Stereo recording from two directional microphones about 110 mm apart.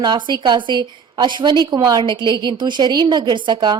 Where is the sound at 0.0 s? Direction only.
40° right (ahead or behind).